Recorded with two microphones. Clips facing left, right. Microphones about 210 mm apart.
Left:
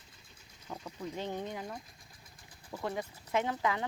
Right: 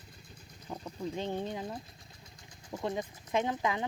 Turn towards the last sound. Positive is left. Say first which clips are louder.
# right 1 dB
turn(degrees=-20)  # may be behind; listen again after turning